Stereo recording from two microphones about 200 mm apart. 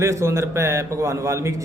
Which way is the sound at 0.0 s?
15° right (ahead or behind).